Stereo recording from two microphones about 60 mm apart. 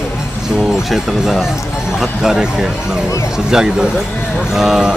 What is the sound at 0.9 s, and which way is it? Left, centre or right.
Speech, centre.